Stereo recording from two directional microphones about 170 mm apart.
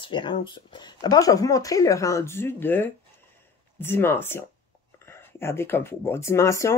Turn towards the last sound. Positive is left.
turn(degrees=15)  # may be behind; listen again after turning